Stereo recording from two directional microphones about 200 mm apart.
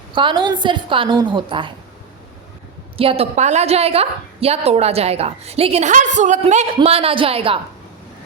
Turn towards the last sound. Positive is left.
turn(degrees=-30)  # may be behind; listen again after turning